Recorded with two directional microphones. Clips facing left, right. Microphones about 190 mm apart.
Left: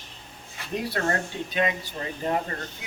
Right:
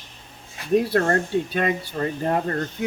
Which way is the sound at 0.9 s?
50° right (ahead or behind).